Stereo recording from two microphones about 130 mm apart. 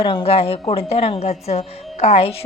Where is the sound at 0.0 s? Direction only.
40° left (ahead or behind).